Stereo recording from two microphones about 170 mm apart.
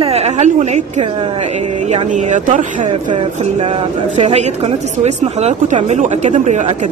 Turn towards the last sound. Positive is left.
turn(degrees=-45)  # may be behind; listen again after turning